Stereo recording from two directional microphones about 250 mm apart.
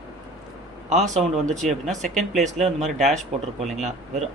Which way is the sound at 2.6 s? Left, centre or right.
Right.